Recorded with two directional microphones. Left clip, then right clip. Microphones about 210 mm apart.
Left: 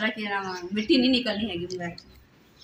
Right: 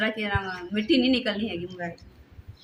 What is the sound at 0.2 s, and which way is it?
Speech, 15° right (ahead or behind).